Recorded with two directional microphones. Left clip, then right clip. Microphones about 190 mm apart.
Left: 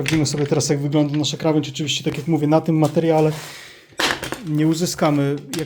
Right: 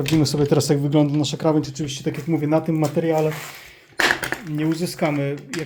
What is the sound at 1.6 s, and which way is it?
Speech, 25° left (ahead or behind).